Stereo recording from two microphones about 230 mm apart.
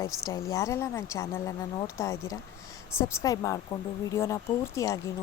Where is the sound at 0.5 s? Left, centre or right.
Centre.